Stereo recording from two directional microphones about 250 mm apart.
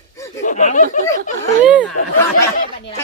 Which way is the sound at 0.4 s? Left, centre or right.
Left.